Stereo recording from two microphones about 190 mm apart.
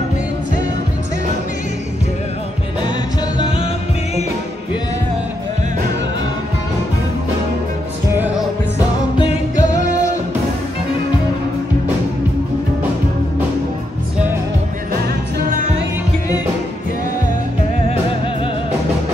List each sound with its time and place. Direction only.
8.4 s music: 20° left (ahead or behind)
9.3 s music: 40° left (ahead or behind)